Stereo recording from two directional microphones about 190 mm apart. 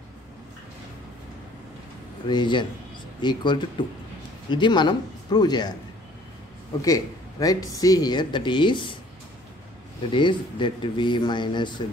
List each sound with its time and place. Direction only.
2.2 s speech: 25° left (ahead or behind)
6.8 s speech: 20° left (ahead or behind)
10.1 s speech: 25° left (ahead or behind)